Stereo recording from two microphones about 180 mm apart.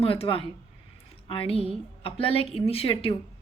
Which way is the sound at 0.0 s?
30° left (ahead or behind).